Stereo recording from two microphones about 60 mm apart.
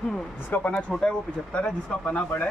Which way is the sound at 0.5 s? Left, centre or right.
Left.